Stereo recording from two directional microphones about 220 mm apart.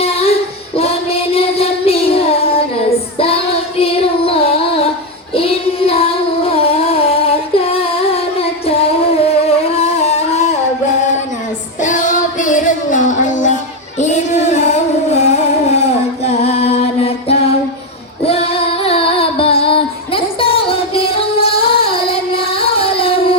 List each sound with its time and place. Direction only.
0.0 s child singing: 25° left (ahead or behind)
11.8 s music: 35° left (ahead or behind)
18.3 s female singing: 25° left (ahead or behind)